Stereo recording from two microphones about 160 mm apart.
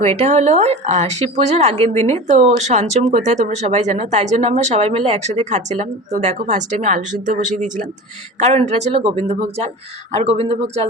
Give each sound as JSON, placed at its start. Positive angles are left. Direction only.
{"t": 0.0, "sound": "speech", "side_deg": -45}